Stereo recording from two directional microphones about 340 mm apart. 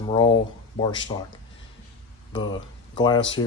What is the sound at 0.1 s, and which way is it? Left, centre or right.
Speech, centre.